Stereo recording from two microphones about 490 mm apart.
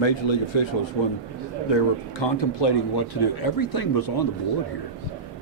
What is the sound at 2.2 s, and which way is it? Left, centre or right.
Speech, left.